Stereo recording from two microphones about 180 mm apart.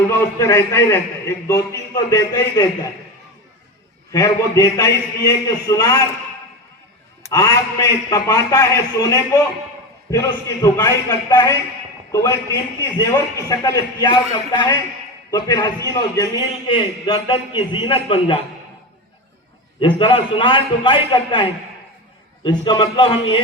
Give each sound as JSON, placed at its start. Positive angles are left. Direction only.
{"t": 0.1, "sound": "a man's voice", "side_deg": 15}
{"t": 4.1, "sound": "a man's voice", "side_deg": 15}
{"t": 7.3, "sound": "a man's voice", "side_deg": 20}
{"t": 19.8, "sound": "a man's voice", "side_deg": 25}